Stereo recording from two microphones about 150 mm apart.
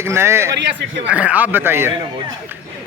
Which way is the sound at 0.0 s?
15° right (ahead or behind).